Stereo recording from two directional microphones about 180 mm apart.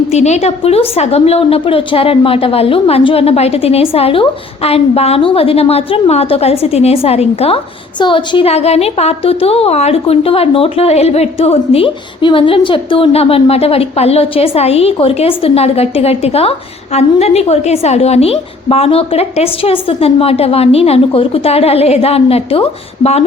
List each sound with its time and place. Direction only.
0.1 s a woman's voice: 35° left (ahead or behind)